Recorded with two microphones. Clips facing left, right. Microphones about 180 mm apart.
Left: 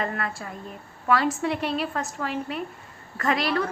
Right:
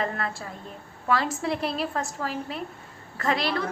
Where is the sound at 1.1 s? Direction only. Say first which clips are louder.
Left 2 dB; 30° right (ahead or behind).